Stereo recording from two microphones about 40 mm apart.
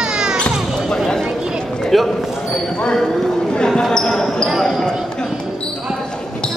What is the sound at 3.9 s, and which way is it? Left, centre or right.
Basketball bounce, centre.